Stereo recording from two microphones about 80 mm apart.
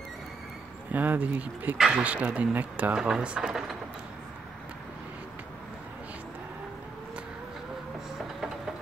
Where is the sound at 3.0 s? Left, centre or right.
Centre.